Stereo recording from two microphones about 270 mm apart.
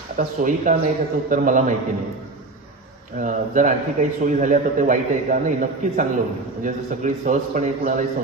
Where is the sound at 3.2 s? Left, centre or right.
Right.